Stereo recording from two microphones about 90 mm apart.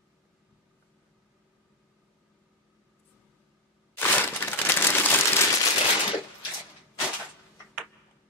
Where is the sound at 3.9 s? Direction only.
20° left (ahead or behind).